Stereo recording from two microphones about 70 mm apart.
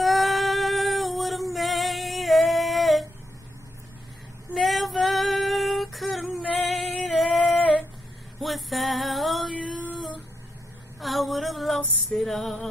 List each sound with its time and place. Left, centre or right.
0.0 s female singing: centre
4.6 s female singing: centre
8.4 s music: centre
9.6 s female singing: centre
11.0 s female singing: centre
11.8 s music: left
12.2 s music: centre